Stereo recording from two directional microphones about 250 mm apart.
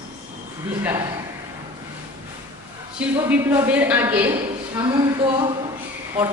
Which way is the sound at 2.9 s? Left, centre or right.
Centre.